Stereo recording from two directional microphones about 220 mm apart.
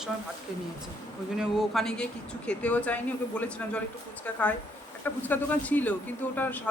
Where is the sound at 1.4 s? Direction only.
Centre (ahead or behind).